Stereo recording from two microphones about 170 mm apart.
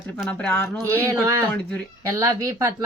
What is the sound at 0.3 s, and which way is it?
Speech, 10° left (ahead or behind).